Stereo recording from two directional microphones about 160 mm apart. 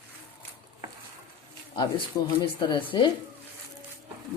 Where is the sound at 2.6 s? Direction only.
30° left (ahead or behind).